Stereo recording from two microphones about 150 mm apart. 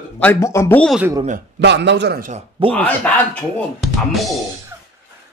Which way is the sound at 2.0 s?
90° right.